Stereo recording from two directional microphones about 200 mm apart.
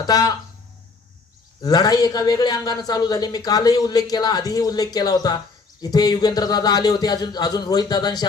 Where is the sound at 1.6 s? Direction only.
20° left (ahead or behind).